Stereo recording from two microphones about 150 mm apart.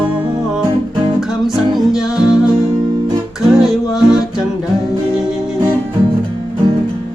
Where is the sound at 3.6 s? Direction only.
5° right (ahead or behind).